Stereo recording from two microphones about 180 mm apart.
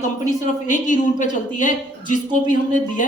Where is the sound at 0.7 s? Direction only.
45° left (ahead or behind).